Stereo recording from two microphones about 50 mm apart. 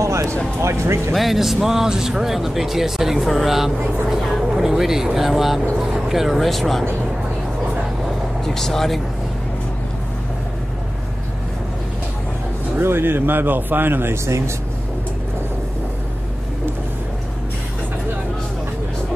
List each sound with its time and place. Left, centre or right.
0.0 s music: right
0.6 s speech: right
1.1 s speech: centre
8.5 s speech: centre
12.8 s speech: right
14.1 s speech: right